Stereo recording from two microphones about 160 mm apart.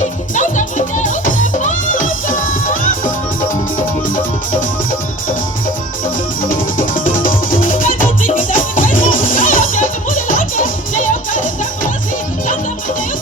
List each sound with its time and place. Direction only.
0.3 s music: 50° left (ahead or behind)
6.5 s music: 55° left (ahead or behind)